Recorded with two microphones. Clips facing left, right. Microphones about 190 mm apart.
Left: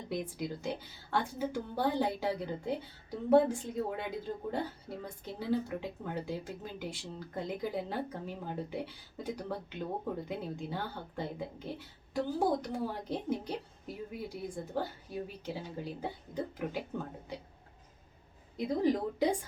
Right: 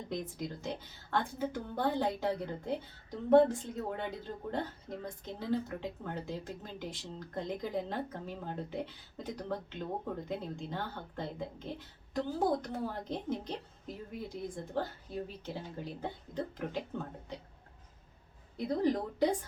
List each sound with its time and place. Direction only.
0.1 s speech: 10° left (ahead or behind)
18.5 s speech: 10° left (ahead or behind)